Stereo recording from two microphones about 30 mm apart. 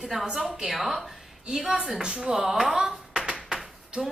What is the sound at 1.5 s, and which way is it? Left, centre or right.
Speech, centre.